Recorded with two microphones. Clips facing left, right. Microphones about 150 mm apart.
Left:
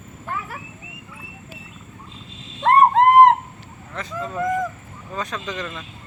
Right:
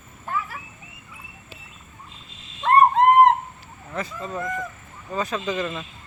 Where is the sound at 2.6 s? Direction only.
90° left.